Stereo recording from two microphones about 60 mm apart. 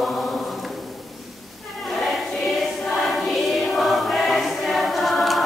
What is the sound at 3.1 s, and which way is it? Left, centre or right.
Choir, centre.